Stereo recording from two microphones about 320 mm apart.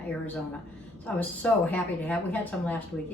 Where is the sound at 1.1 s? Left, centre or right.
Centre.